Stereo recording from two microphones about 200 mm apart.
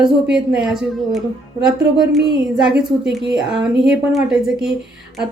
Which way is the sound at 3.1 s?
5° right (ahead or behind).